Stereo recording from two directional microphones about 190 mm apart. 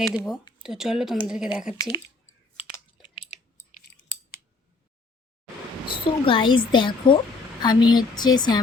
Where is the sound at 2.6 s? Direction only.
30° left (ahead or behind).